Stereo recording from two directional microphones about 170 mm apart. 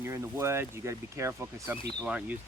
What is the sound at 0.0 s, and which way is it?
Speech, 15° right (ahead or behind).